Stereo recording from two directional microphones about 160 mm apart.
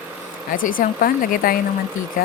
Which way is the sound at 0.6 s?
60° left (ahead or behind).